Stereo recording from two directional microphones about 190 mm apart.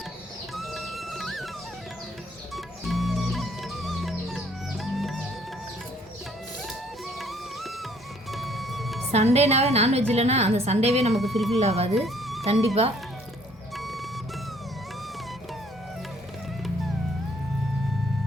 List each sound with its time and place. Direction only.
0.5 s music: centre (ahead or behind)
2.8 s music: centre (ahead or behind)
7.2 s music: centre (ahead or behind)
9.1 s a woman's voice: 35° right (ahead or behind)
11.1 s speech: centre (ahead or behind)
11.6 s a woman's voice: 35° right (ahead or behind)
11.9 s music: centre (ahead or behind)
13.7 s music: centre (ahead or behind)